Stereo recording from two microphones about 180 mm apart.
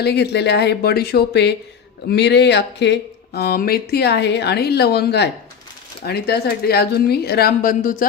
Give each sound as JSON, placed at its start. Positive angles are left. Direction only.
{"t": 0.0, "sound": "speech", "side_deg": 65}